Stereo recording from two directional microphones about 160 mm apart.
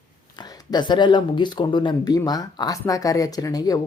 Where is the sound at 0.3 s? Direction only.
30° left (ahead or behind).